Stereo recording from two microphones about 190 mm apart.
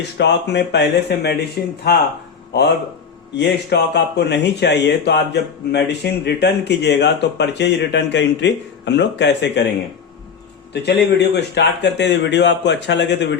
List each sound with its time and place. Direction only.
0.2 s speech: 65° left (ahead or behind)
3.3 s speech: 65° left (ahead or behind)
10.8 s speech: 60° left (ahead or behind)